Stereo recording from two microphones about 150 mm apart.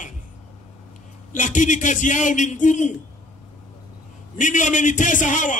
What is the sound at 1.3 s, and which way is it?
A man's voice, 55° left (ahead or behind).